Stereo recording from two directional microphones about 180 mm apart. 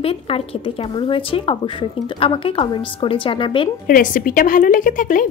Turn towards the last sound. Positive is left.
turn(degrees=45)  # may be behind; listen again after turning